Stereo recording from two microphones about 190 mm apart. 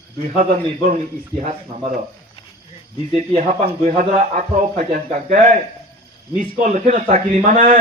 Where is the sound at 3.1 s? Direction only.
35° right (ahead or behind).